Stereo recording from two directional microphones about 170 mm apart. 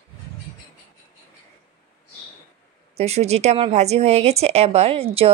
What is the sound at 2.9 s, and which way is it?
A woman's voice, 40° right (ahead or behind).